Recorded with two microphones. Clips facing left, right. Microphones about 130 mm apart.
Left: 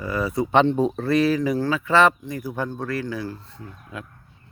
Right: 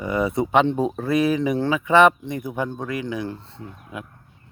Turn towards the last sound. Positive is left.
turn(degrees=-20)  # may be behind; listen again after turning